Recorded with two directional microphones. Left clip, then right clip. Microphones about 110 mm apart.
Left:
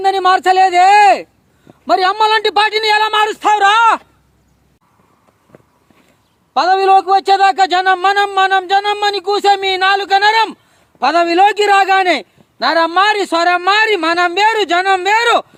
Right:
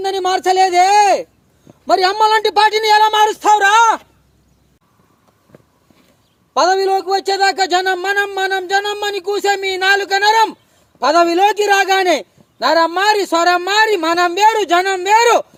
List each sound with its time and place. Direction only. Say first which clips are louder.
0.0 s a man's voice: left 5 dB; 20° left (ahead or behind)
6.5 s a man's voice: left 4 dB; 20° left (ahead or behind)